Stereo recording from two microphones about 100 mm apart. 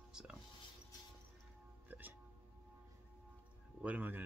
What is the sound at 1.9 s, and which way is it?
Music, 20° right (ahead or behind).